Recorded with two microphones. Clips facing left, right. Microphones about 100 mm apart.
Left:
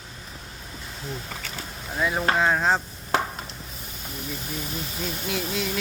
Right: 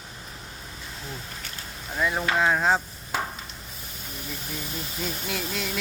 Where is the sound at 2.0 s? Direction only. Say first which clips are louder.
Left 1 dB; 5° left (ahead or behind).